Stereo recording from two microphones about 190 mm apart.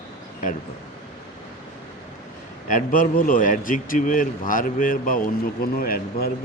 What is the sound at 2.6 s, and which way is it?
A man's voice, 45° left (ahead or behind).